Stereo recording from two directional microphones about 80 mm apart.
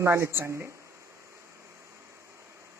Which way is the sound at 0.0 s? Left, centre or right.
Right.